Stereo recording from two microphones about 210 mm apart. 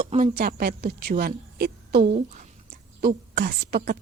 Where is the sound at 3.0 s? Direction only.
45° right (ahead or behind).